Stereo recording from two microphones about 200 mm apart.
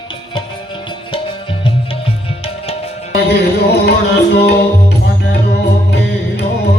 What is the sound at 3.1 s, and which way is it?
Music, 55° left (ahead or behind).